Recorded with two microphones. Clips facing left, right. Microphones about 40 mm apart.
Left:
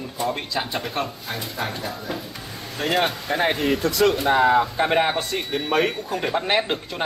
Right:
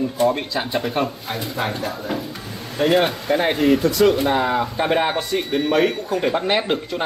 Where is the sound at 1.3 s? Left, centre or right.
Right.